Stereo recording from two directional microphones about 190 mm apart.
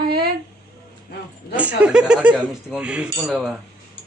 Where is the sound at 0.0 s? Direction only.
55° right (ahead or behind).